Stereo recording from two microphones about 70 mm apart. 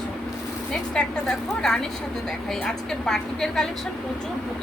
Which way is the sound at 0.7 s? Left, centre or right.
Centre.